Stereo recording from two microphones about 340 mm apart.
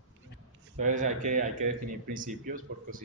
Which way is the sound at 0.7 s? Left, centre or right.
Right.